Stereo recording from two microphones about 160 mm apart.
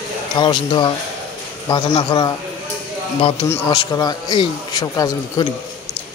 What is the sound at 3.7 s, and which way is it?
A man's voice, 25° left (ahead or behind).